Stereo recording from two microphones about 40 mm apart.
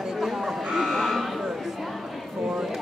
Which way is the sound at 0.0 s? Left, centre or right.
Centre.